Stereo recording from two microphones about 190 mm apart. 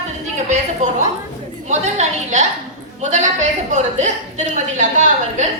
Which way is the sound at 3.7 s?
40° right (ahead or behind).